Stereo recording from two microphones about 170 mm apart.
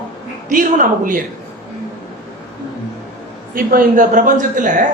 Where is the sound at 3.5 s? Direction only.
55° right (ahead or behind).